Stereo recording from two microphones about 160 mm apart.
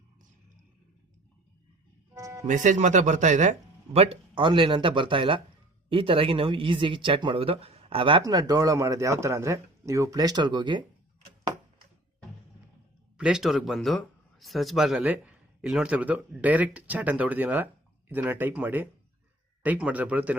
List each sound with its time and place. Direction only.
2.1 s music: 20° right (ahead or behind)
2.5 s speech: 50° right (ahead or behind); by 10.8 s 30° right (ahead or behind)
13.1 s speech: 5° right (ahead or behind)